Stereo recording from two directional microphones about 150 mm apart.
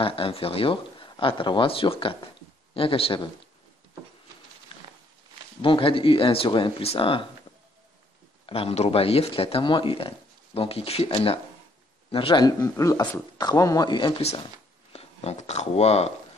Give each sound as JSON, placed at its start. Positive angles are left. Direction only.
{"t": 0.0, "sound": "speech", "side_deg": 35}
{"t": 5.6, "sound": "speech", "side_deg": 35}
{"t": 8.5, "sound": "speech", "side_deg": 40}